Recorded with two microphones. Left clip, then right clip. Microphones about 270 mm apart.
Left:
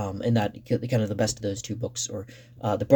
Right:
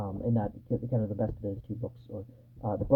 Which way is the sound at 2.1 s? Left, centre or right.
Left.